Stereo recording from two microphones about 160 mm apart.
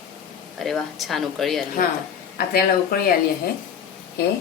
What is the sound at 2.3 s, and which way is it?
Speech, 70° left (ahead or behind).